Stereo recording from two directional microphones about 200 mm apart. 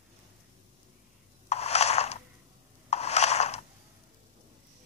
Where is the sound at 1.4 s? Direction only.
30° left (ahead or behind).